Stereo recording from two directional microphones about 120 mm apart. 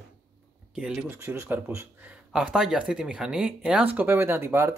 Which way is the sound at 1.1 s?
20° right (ahead or behind).